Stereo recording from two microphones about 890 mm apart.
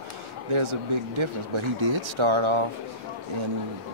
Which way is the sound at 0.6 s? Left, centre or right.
Right.